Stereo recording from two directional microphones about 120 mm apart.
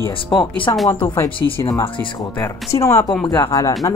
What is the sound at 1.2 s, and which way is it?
Speech, 45° left (ahead or behind).